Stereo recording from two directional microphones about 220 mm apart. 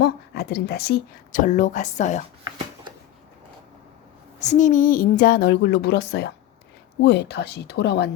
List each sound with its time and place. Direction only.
0.0 s a woman's voice: 45° left (ahead or behind)
4.4 s a woman's voice: 35° left (ahead or behind); by 8.1 s 50° left (ahead or behind)